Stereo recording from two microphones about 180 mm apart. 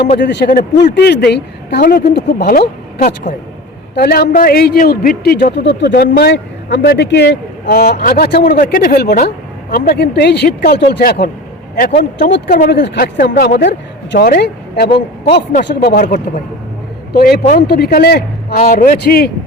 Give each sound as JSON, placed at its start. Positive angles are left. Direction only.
{"t": 0.2, "sound": "a man's voice", "side_deg": 70}
{"t": 0.4, "sound": "speech", "side_deg": 50}
{"t": 0.9, "sound": "speech", "side_deg": 65}
{"t": 3.9, "sound": "speech", "side_deg": 60}
{"t": 4.3, "sound": "speech", "side_deg": 50}
{"t": 7.7, "sound": "speech", "side_deg": 55}
{"t": 12.7, "sound": "speech", "side_deg": 70}
{"t": 14.9, "sound": "speech", "side_deg": 30}
{"t": 15.7, "sound": "speech", "side_deg": 55}
{"t": 17.2, "sound": "speech", "side_deg": 60}